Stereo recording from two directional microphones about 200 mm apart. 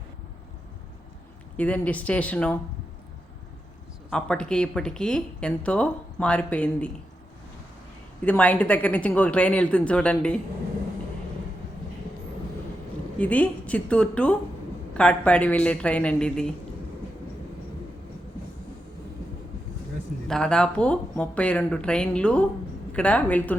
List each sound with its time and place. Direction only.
1.5 s speech: 5° left (ahead or behind)
4.1 s speech: 5° left (ahead or behind)
8.2 s speech: 5° left (ahead or behind)
13.1 s speech: 5° left (ahead or behind)
20.2 s speech: 5° left (ahead or behind)